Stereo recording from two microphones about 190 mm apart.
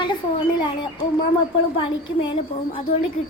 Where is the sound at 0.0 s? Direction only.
25° left (ahead or behind).